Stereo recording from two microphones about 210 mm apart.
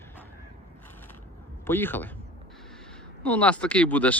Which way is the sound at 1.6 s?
10° left (ahead or behind).